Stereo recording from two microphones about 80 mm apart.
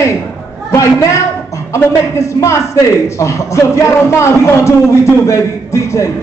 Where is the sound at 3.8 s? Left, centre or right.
Left.